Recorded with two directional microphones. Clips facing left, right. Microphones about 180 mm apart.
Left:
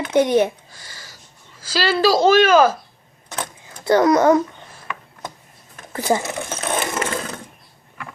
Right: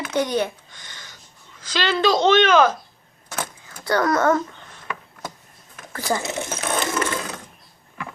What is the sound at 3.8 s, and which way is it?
Speech, 20° left (ahead or behind).